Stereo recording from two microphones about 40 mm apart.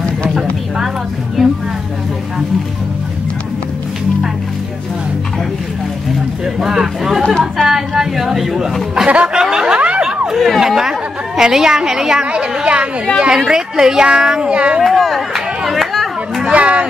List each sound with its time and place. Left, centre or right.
1.4 s a sound: centre
6.4 s a woman's voice: centre
9.0 s speech: right
9.4 s snicker: centre
9.8 s a sound: right
10.2 s a woman's voice: centre
12.3 s a woman's voice: right
13.5 s a woman's voice: centre
14.8 s speech: centre
15.3 s a sound: centre
16.4 s speech: right